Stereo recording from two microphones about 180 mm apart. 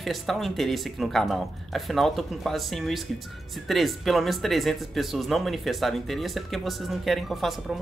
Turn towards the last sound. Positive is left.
turn(degrees=0)  # may be behind; listen again after turning